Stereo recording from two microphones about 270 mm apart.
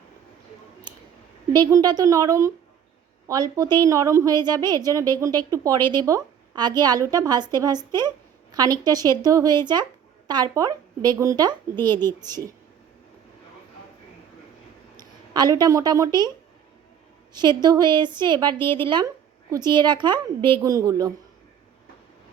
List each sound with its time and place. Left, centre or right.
1.5 s a woman's voice: centre
14.9 s speech: centre
17.3 s a woman's voice: centre